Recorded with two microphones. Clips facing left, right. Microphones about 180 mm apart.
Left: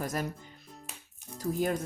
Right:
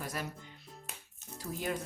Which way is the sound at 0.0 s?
45° left (ahead or behind).